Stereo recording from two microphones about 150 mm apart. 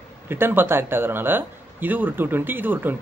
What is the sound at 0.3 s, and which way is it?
Speech, 15° right (ahead or behind).